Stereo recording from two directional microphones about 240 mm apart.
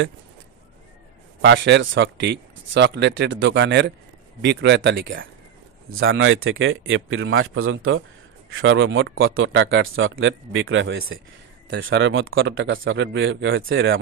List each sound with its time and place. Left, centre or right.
1.4 s a man's voice: right